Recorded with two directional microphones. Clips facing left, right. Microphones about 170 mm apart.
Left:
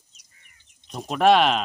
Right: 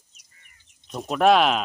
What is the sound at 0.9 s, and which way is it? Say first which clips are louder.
Speech: even; centre (ahead or behind).